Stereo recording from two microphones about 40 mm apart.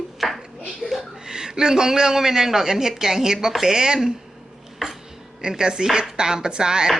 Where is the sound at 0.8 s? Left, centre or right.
Left.